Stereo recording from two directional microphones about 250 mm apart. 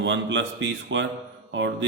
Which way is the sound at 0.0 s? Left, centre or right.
Right.